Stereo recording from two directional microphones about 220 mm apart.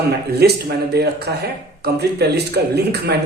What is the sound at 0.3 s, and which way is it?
Speech, 45° right (ahead or behind).